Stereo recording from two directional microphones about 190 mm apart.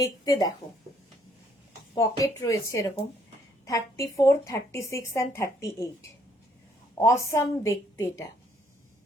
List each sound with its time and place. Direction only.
0.0 s speech: 20° left (ahead or behind)
2.0 s a woman's voice: 15° left (ahead or behind)
3.7 s a woman's voice: 15° left (ahead or behind)